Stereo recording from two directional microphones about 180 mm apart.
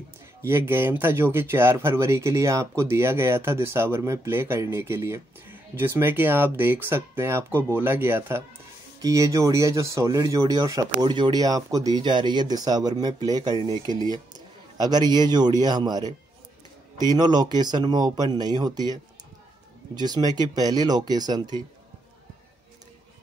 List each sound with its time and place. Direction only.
0.4 s speech: 15° right (ahead or behind)
20.0 s speech: 20° right (ahead or behind)